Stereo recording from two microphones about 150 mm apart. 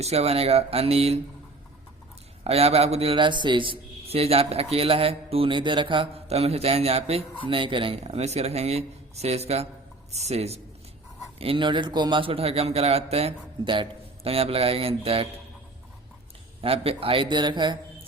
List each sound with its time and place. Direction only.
0.0 s speech: 45° right (ahead or behind)
2.4 s a man's voice: 40° right (ahead or behind)
16.6 s a man's voice: 40° right (ahead or behind)